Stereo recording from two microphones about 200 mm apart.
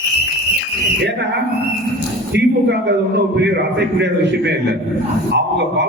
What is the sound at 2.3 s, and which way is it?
A man's voice, 55° right (ahead or behind).